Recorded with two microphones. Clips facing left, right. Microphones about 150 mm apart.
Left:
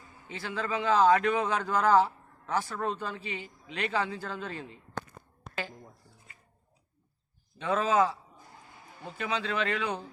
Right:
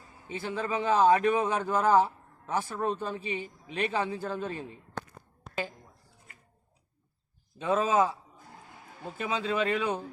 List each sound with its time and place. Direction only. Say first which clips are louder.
0.3 s a man's voice: right 2 dB; 15° right (ahead or behind)
7.6 s a man's voice: right 1 dB; 15° right (ahead or behind)
9.1 s a man's voice: right 2 dB; 20° right (ahead or behind)